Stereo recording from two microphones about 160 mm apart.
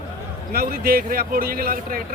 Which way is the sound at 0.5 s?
70° right (ahead or behind).